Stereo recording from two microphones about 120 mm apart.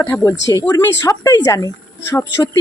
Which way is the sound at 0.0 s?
25° left (ahead or behind).